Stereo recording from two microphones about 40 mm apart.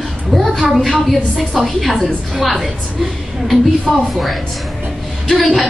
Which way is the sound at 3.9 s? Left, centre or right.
Centre.